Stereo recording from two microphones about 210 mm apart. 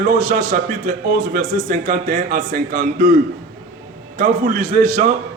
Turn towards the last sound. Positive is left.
turn(degrees=-40)  # may be behind; listen again after turning